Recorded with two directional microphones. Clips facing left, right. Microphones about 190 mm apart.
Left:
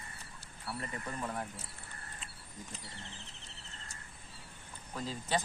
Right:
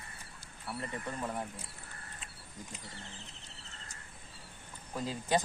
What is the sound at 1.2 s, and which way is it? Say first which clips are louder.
Speech: right 1 dB; 10° right (ahead or behind).